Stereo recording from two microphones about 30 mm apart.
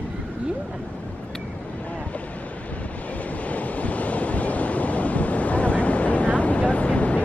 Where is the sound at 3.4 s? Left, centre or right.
Left.